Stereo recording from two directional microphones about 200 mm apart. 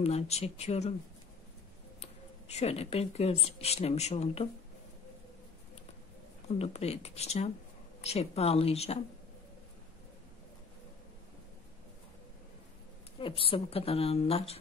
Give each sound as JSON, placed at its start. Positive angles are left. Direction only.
{"t": 0.0, "sound": "speech", "side_deg": 30}
{"t": 2.0, "sound": "speech", "side_deg": 35}
{"t": 6.6, "sound": "speech", "side_deg": 30}
{"t": 13.2, "sound": "a woman's voice", "side_deg": 25}